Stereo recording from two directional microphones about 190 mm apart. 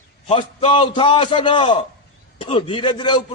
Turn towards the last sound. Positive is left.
turn(degrees=25)  # may be behind; listen again after turning